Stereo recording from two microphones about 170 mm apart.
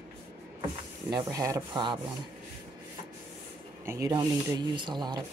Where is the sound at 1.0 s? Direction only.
20° right (ahead or behind).